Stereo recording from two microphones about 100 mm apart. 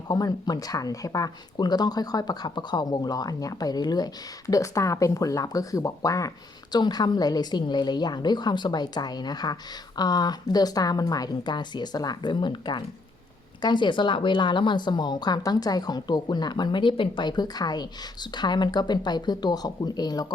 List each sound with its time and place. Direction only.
0.1 s a woman's voice: 40° left (ahead or behind)